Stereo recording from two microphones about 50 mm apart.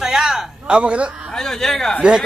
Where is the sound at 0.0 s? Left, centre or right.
Centre.